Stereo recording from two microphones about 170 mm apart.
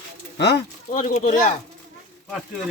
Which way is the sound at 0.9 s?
45° left (ahead or behind).